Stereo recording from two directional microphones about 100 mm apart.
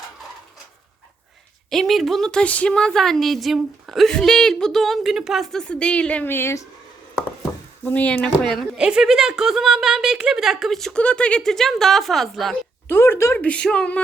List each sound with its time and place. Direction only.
1.7 s a woman's voice: centre (ahead or behind); by 6.7 s 25° left (ahead or behind)
7.9 s speech: 15° left (ahead or behind)
8.7 s a woman's voice: 5° right (ahead or behind)
12.9 s speech: 25° left (ahead or behind)
13.3 s speech: 15° left (ahead or behind)